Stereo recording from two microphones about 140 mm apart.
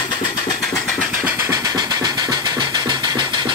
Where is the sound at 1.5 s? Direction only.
25° right (ahead or behind).